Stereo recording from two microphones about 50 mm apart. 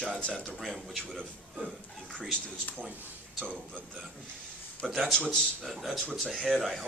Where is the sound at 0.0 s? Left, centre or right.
Left.